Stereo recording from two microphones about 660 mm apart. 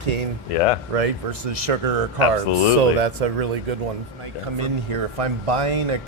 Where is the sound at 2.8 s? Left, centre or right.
Right.